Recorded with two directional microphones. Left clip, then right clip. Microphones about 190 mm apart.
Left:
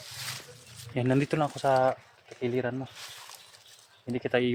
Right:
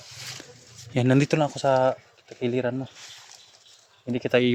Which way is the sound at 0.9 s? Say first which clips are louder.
Right 5 dB; 50° right (ahead or behind).